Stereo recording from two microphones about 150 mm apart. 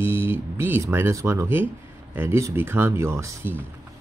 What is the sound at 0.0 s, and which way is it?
Speech, 15° right (ahead or behind).